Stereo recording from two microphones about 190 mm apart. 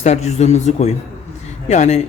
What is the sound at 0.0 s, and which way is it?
A man's voice, 35° left (ahead or behind).